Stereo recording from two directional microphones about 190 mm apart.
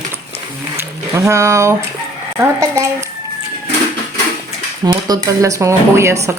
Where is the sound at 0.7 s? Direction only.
15° right (ahead or behind).